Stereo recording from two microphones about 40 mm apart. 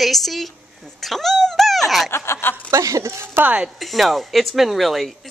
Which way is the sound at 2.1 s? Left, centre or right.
Left.